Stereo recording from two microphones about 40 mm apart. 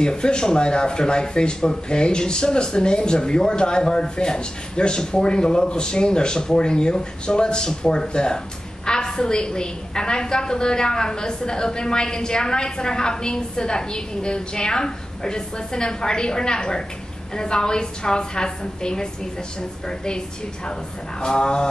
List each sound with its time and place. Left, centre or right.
0.0 s speech: left
21.2 s speech: left